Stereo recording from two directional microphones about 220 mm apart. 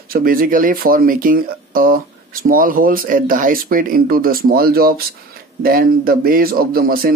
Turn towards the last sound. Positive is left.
turn(degrees=-40)  # may be behind; listen again after turning